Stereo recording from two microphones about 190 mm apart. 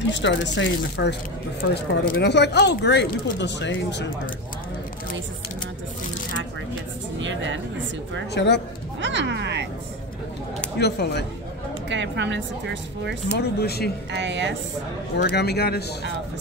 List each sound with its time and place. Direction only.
0.1 s speech: 70° left (ahead or behind)
7.2 s speech: 75° right (ahead or behind)
8.4 s speech: 65° left (ahead or behind)
9.0 s speech: 65° right (ahead or behind)
10.8 s speech: 60° left (ahead or behind)
11.9 s speech: 70° right (ahead or behind)
13.4 s speech: 55° left (ahead or behind)
14.1 s speech: 70° right (ahead or behind)
15.2 s speech: 60° left (ahead or behind)